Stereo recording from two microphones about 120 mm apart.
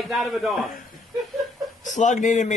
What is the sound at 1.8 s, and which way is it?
Speech, 90° left.